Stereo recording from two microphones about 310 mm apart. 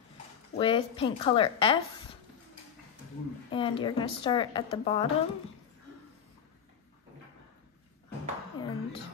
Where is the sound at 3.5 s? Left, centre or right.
Centre.